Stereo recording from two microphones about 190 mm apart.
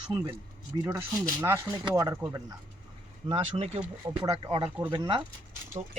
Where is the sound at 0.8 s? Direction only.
15° right (ahead or behind).